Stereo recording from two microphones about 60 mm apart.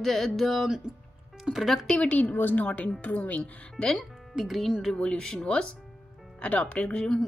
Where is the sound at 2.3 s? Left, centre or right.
Left.